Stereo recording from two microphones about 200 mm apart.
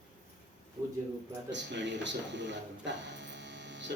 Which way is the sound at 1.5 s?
60° right (ahead or behind).